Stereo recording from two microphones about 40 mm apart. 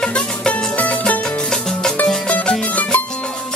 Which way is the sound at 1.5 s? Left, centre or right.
Centre.